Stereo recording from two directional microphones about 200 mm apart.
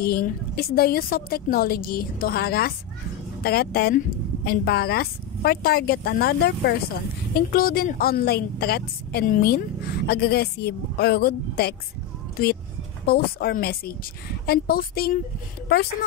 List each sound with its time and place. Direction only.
0.0 s a woman's voice: 50° left (ahead or behind)
13.0 s a woman's voice: 50° left (ahead or behind)